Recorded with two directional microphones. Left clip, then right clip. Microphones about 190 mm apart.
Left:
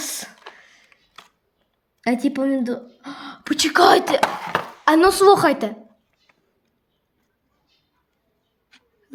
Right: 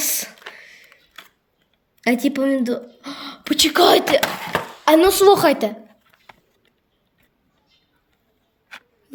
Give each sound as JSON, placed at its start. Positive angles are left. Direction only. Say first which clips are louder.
{"t": 0.0, "sound": "a sound", "louder": "right 5 dB", "side_deg": 10}
{"t": 2.0, "sound": "speech", "louder": "right 2 dB", "side_deg": 10}
{"t": 4.2, "sound": "speech", "louder": "left 1 dB", "side_deg": -20}
{"t": 4.9, "sound": "a woman's voice", "louder": "right 1 dB", "side_deg": 15}